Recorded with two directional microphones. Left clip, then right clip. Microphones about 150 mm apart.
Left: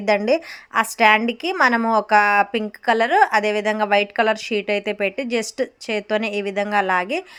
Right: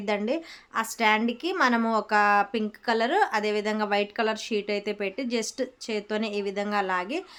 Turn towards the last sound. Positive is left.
turn(degrees=25)  # may be behind; listen again after turning